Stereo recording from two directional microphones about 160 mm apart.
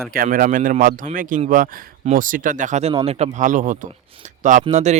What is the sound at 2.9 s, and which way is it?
Speech, 35° right (ahead or behind).